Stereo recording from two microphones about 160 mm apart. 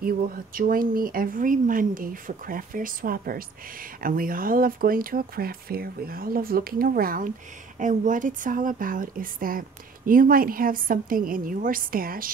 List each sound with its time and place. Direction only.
0.0 s speech: 65° right (ahead or behind)